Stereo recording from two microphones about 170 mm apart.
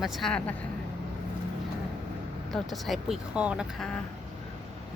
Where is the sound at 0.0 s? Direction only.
Centre (ahead or behind).